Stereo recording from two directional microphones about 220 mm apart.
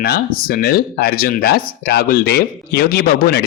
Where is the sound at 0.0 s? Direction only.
45° left (ahead or behind).